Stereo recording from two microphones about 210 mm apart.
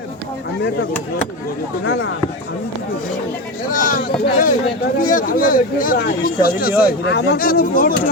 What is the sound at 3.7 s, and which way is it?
Speech, 40° left (ahead or behind).